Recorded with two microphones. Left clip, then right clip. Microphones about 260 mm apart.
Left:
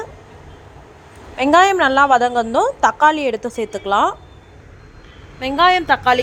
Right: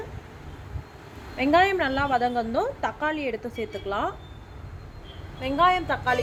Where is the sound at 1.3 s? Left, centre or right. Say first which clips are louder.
Left 8 dB; centre.